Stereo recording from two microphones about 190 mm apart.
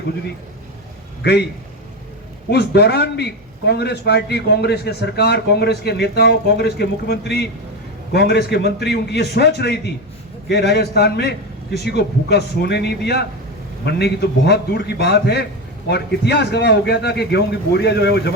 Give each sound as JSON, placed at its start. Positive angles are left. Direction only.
{"t": 1.2, "sound": "a man's voice", "side_deg": 60}
{"t": 2.5, "sound": "a man's voice", "side_deg": 60}